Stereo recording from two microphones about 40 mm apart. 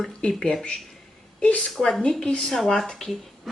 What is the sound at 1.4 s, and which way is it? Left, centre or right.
Speech, left.